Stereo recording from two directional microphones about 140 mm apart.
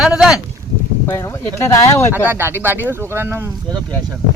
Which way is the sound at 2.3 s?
15° right (ahead or behind).